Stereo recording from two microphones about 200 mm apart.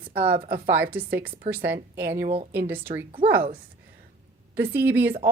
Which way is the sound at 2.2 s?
30° right (ahead or behind).